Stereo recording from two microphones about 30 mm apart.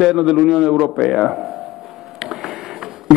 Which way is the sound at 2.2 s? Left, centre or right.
Right.